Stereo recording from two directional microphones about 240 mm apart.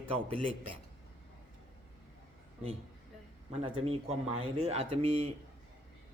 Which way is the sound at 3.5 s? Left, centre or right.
Right.